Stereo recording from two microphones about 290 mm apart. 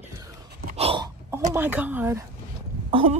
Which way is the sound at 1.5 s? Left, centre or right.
Centre.